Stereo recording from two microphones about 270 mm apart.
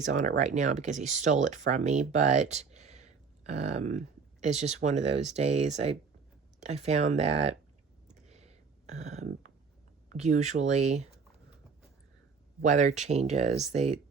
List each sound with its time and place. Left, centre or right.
0.0 s speech: right
8.0 s a sound: right
10.1 s speech: right
12.6 s speech: right